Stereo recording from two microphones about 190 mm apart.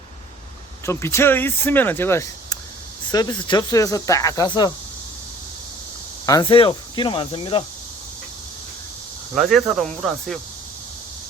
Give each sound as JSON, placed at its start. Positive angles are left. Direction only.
{"t": 0.9, "sound": "speech", "side_deg": 15}
{"t": 6.2, "sound": "speech", "side_deg": 20}
{"t": 9.3, "sound": "speech", "side_deg": 0}